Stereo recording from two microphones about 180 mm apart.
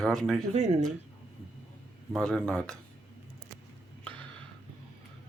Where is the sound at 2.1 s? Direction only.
5° left (ahead or behind).